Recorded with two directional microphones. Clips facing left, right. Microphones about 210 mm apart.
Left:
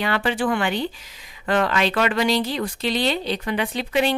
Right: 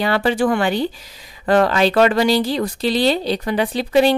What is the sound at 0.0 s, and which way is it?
Speech, 35° right (ahead or behind).